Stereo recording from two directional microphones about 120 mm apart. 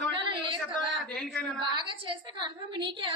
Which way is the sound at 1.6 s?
40° right (ahead or behind).